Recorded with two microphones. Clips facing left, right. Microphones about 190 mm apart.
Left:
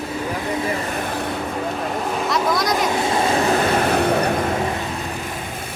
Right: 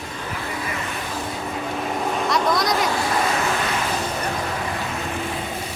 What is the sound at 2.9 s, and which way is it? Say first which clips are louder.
Speech: left 3 dB; 25° left (ahead or behind).